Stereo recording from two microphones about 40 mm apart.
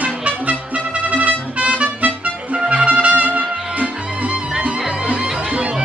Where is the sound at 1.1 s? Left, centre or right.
Right.